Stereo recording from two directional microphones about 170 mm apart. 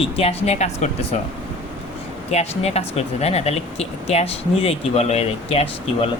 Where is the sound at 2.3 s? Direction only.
40° left (ahead or behind).